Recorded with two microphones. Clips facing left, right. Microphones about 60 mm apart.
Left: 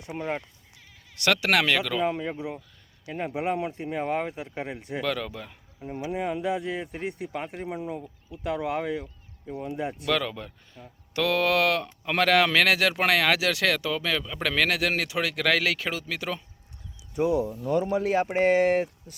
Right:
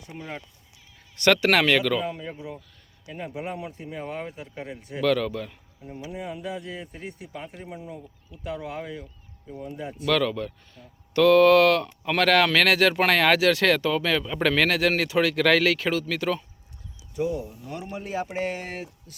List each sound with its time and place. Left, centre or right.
0.2 s speech: left
1.2 s speech: centre
2.0 s speech: left
5.0 s speech: centre
5.8 s speech: left
7.8 s speech: left
10.1 s speech: centre
18.0 s speech: left
18.3 s speech: left